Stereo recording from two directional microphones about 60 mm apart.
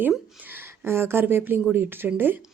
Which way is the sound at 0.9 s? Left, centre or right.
Right.